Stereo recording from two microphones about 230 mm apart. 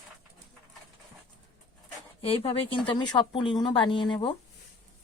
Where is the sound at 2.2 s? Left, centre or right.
Left.